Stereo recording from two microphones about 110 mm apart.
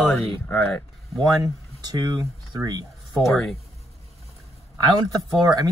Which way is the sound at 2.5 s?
35° right (ahead or behind).